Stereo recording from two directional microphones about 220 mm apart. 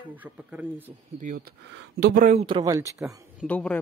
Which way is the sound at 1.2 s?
40° right (ahead or behind).